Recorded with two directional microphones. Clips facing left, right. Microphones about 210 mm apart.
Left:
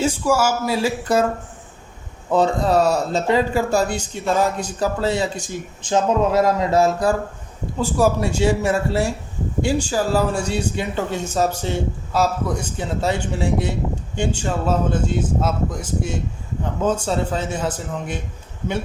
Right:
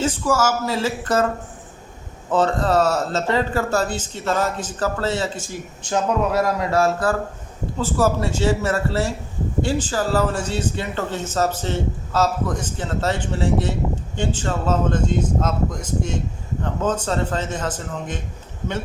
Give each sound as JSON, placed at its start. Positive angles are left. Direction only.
{"t": 0.0, "sound": "speech", "side_deg": 10}
{"t": 2.3, "sound": "speech", "side_deg": 10}